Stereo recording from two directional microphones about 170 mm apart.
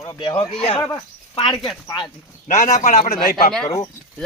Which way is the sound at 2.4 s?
50° left (ahead or behind).